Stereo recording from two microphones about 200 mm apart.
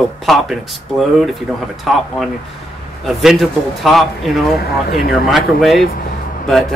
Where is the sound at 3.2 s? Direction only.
Centre (ahead or behind).